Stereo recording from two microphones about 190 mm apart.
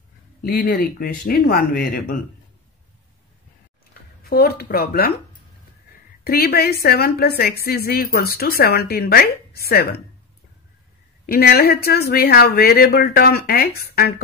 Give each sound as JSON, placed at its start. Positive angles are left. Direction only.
{"t": 0.4, "sound": "a woman's voice", "side_deg": 50}
{"t": 4.2, "sound": "a woman's voice", "side_deg": 55}
{"t": 6.2, "sound": "a woman's voice", "side_deg": 55}
{"t": 11.2, "sound": "a woman's voice", "side_deg": 55}